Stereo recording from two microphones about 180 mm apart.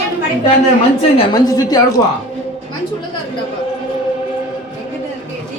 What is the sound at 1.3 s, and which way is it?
Speech, 20° left (ahead or behind).